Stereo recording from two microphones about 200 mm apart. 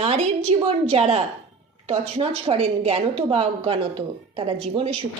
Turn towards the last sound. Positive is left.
turn(degrees=-30)  # may be behind; listen again after turning